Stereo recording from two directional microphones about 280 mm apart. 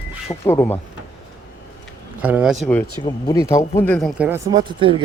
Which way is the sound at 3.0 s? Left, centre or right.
Centre.